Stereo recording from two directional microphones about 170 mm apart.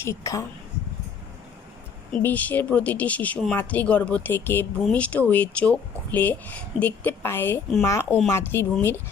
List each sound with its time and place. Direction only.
0.0 s speech: 15° left (ahead or behind)
2.2 s speech: 10° left (ahead or behind)